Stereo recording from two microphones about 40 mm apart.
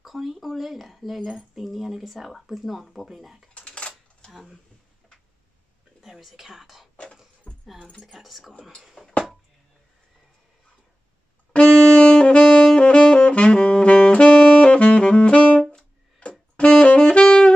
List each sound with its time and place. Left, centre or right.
0.0 s speech: centre
3.5 s a sound: left
6.0 s speech: centre
7.5 s keys jangling: centre
8.0 s speech: centre
9.0 s a sound: left
11.5 s saxophone: left